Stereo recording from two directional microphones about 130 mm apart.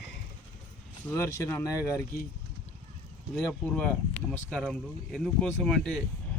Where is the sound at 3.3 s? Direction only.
5° left (ahead or behind).